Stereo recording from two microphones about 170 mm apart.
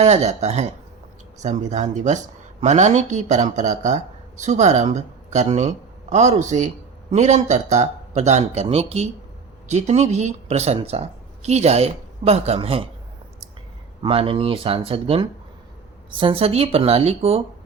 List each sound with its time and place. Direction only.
0.0 s speech: 40° right (ahead or behind)
14.0 s speech: 35° right (ahead or behind)